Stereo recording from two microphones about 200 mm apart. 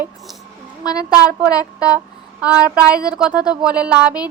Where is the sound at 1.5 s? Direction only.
15° left (ahead or behind).